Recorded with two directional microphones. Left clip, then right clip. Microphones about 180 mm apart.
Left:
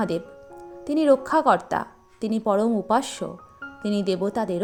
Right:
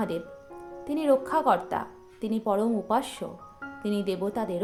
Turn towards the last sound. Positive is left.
turn(degrees=40)  # may be behind; listen again after turning